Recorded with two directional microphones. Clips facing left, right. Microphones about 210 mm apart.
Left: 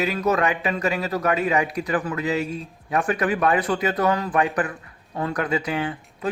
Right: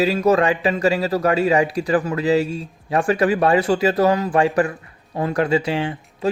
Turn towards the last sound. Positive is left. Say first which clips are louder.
# right 4 dB
turn(degrees=-25)  # may be behind; listen again after turning